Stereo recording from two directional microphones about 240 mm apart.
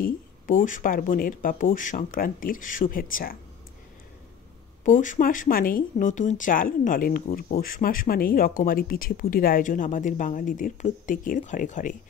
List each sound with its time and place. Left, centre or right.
0.0 s speech: left
4.8 s speech: left